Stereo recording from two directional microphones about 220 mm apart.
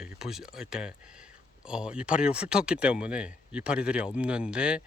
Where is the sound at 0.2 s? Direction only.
Centre (ahead or behind).